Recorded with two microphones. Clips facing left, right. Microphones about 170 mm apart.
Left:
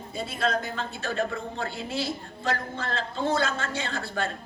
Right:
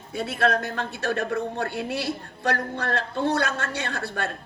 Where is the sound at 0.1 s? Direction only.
75° right (ahead or behind).